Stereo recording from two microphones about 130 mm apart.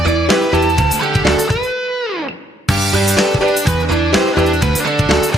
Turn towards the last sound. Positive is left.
turn(degrees=0)  # may be behind; listen again after turning